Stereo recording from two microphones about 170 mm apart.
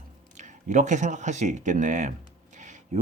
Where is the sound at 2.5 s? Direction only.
45° right (ahead or behind).